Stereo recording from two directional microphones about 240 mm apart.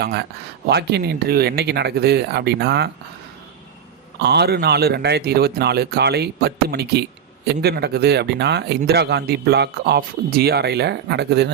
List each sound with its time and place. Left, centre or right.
0.0 s a man's voice: right
4.2 s a man's voice: right